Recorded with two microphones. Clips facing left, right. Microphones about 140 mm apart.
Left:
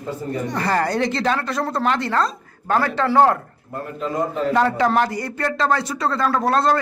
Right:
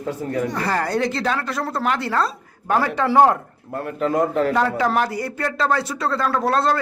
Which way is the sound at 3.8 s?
70° right (ahead or behind).